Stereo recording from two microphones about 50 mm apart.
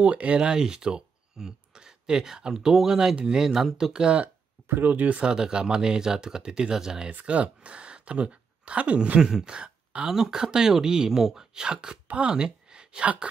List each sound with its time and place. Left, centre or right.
0.0 s speech: right
4.6 s speech: right
5.1 s speech: centre
7.1 s speech: right
9.2 s speech: centre